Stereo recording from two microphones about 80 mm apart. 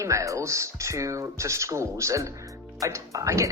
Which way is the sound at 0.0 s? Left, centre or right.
Right.